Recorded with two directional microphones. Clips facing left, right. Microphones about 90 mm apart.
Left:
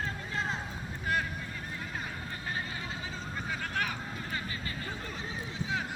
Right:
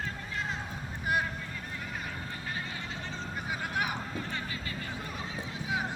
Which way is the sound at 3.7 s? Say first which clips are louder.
Right 2 dB; 15° right (ahead or behind).